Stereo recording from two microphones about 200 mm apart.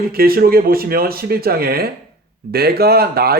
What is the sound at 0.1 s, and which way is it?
Speech, 50° right (ahead or behind).